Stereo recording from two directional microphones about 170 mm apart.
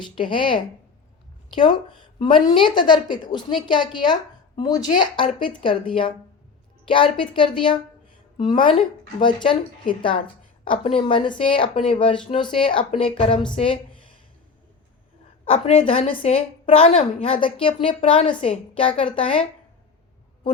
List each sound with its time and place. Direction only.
0.0 s a woman's voice: 30° left (ahead or behind)
15.4 s a woman's voice: 35° left (ahead or behind)